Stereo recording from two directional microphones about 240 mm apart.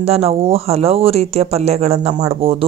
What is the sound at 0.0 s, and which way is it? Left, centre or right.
Speech, right.